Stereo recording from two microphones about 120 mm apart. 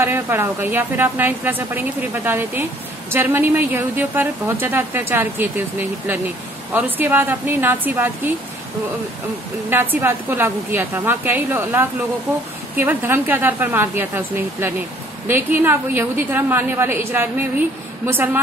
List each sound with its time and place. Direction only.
0.0 s a woman's voice: 20° right (ahead or behind)
9.7 s a woman's voice: 15° right (ahead or behind)